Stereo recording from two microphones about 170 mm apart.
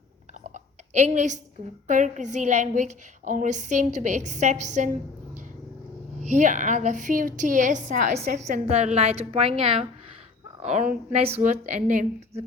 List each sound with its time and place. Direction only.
0.4 s a sound: 45° right (ahead or behind)
1.9 s a woman's voice: 45° right (ahead or behind)
6.1 s a woman's voice: 45° right (ahead or behind)
10.6 s a woman's voice: 45° right (ahead or behind)